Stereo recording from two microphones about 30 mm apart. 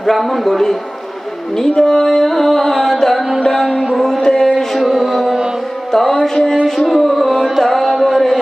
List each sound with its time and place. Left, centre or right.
0.0 s music: centre
0.5 s music: centre
1.8 s music: left; by 3.3 s centre
4.2 s music: left
4.8 s music: right
5.9 s music: centre
6.9 s music: centre
8.1 s a sound: centre